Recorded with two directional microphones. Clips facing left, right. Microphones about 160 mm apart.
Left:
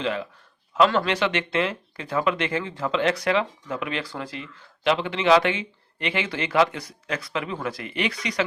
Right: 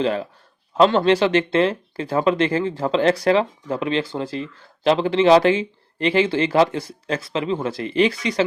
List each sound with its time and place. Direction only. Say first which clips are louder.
0.0 s speech: right 6 dB; 35° right (ahead or behind)